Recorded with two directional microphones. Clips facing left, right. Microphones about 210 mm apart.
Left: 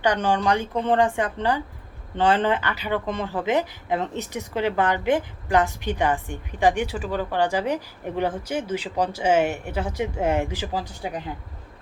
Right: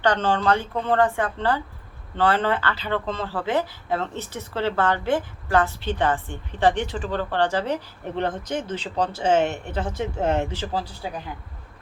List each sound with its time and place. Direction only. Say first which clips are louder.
0.0 s speech: even; 10° left (ahead or behind)